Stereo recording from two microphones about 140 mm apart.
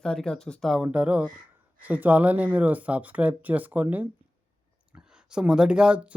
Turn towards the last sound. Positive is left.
turn(degrees=-5)  # may be behind; listen again after turning